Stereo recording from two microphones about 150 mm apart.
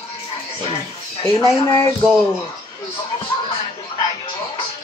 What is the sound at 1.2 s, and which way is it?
Speech, 25° left (ahead or behind).